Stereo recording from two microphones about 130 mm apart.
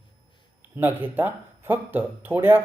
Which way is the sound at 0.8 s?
15° right (ahead or behind).